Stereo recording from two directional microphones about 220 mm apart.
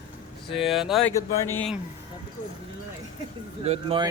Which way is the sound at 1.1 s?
15° left (ahead or behind).